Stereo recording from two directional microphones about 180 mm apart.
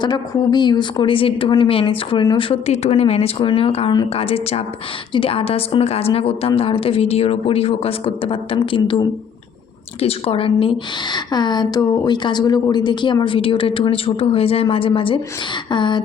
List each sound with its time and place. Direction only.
0.0 s a woman's voice: 25° left (ahead or behind)